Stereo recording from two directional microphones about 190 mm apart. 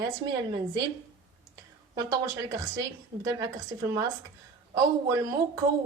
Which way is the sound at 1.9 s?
20° right (ahead or behind).